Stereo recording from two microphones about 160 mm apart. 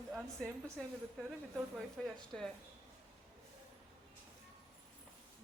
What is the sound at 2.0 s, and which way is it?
Speech, 5° left (ahead or behind).